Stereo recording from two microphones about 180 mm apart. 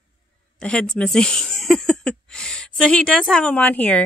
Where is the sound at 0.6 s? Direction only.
5° left (ahead or behind).